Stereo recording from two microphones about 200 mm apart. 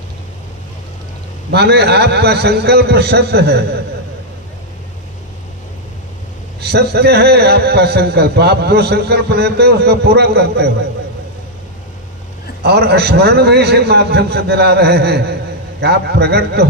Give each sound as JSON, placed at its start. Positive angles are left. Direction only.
{"t": 1.5, "sound": "a man's voice", "side_deg": -55}
{"t": 6.6, "sound": "a man's voice", "side_deg": -55}
{"t": 12.6, "sound": "a man's voice", "side_deg": -55}